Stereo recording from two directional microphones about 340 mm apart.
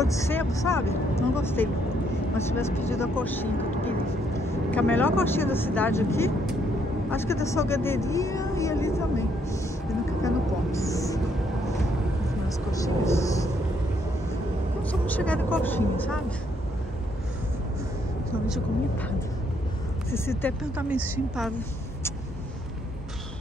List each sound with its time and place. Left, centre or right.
0.0 s speech: centre
7.1 s vehicle: centre
12.4 s speech: centre
14.8 s speech: centre
20.1 s speech: centre
20.7 s speech: centre